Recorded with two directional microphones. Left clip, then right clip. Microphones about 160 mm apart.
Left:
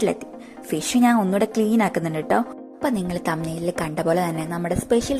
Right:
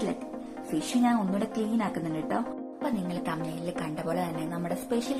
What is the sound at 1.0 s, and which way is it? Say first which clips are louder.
A woman's voice: left 12 dB; 65° left (ahead or behind).